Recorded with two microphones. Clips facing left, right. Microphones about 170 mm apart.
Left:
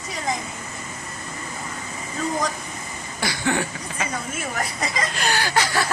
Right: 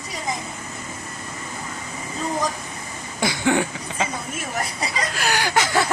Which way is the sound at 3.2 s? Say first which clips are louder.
Right 4 dB; 15° right (ahead or behind).